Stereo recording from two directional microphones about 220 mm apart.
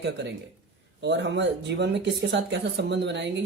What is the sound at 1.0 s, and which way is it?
Speech, 55° right (ahead or behind).